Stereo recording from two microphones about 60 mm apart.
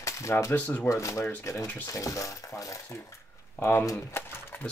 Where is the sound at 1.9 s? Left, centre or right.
Left.